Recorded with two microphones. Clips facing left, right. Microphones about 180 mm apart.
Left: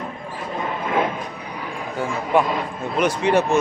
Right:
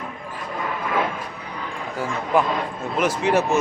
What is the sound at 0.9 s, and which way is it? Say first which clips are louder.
Vehicle: left 2 dB; 20° left (ahead or behind).